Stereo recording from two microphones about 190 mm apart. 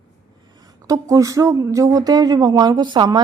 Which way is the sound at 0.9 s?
15° right (ahead or behind).